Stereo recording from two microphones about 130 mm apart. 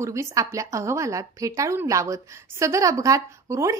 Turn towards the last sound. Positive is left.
turn(degrees=-25)  # may be behind; listen again after turning